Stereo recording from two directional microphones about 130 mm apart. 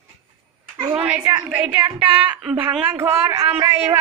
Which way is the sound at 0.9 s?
10° right (ahead or behind).